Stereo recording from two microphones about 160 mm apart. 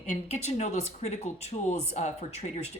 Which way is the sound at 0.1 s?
45° left (ahead or behind).